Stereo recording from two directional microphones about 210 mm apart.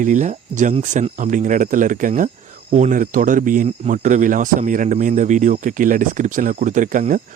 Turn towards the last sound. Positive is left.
turn(degrees=-40)  # may be behind; listen again after turning